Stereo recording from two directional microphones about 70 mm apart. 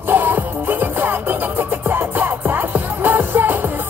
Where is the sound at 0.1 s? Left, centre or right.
Right.